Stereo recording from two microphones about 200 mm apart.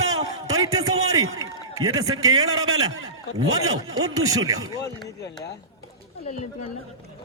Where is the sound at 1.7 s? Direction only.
20° right (ahead or behind).